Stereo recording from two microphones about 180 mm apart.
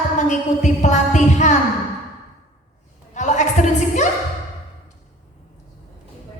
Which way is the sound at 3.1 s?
40° left (ahead or behind).